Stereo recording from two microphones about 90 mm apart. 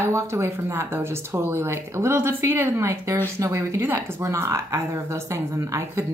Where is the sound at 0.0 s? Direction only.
30° right (ahead or behind).